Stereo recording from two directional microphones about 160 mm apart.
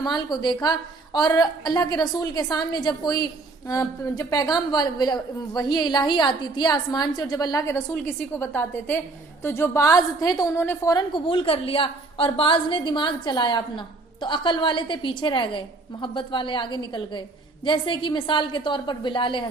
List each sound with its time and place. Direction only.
0.0 s a woman's voice: 25° left (ahead or behind)
8.4 s a woman's voice: 10° left (ahead or behind); by 19.5 s 30° left (ahead or behind)